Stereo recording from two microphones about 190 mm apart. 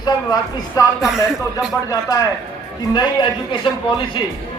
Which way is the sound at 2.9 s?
25° left (ahead or behind).